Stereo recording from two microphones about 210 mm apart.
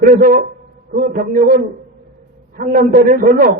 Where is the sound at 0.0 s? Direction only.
40° right (ahead or behind).